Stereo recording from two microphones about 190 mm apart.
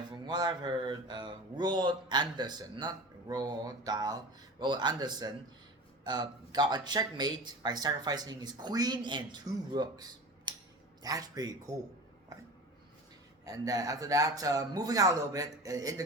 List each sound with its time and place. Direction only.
0.1 s speech: 20° right (ahead or behind)
13.4 s speech: 20° right (ahead or behind)